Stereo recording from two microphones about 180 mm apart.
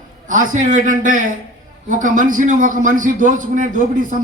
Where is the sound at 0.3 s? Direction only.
45° right (ahead or behind).